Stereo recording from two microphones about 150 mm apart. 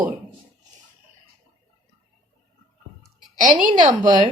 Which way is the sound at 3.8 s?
25° right (ahead or behind).